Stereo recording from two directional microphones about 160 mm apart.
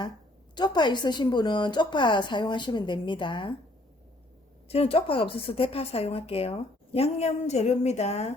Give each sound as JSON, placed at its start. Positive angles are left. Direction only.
{"t": 0.5, "sound": "a woman's voice", "side_deg": 25}
{"t": 4.7, "sound": "a woman's voice", "side_deg": 35}